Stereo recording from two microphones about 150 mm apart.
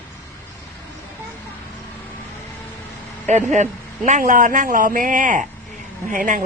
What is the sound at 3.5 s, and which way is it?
A man's voice, 55° right (ahead or behind).